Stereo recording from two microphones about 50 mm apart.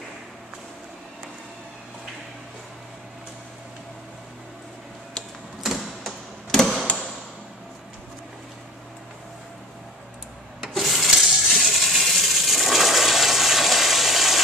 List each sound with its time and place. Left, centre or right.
5.6 s printer: centre
10.7 s water: centre